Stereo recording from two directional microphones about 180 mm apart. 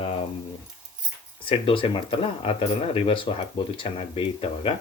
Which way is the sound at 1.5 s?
30° left (ahead or behind).